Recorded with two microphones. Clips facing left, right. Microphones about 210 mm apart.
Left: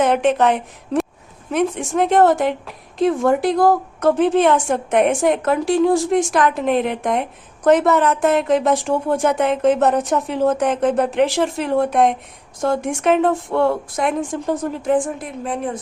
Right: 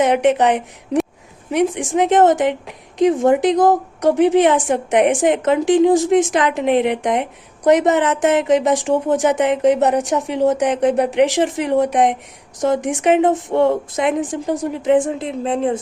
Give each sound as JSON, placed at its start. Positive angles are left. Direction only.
{"t": 0.0, "sound": "a woman's voice", "side_deg": -15}